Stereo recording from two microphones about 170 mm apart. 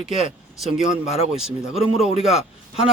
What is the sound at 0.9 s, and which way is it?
Speech, 5° right (ahead or behind).